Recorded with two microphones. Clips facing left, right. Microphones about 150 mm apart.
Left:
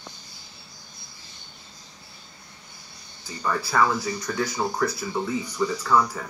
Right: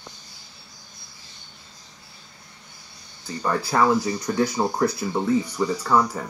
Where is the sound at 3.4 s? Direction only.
20° right (ahead or behind).